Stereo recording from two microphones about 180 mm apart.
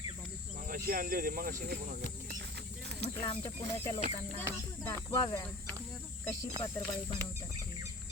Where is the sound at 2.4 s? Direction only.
65° right (ahead or behind).